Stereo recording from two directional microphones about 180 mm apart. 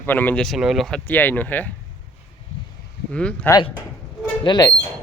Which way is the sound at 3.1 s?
5° left (ahead or behind).